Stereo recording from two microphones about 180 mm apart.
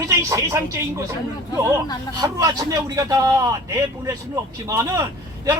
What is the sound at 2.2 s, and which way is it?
A man's voice, 20° right (ahead or behind).